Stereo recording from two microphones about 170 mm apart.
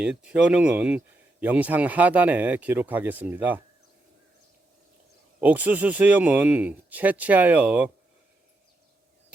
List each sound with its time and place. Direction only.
0.3 s speech: 5° right (ahead or behind)
5.4 s speech: 10° right (ahead or behind)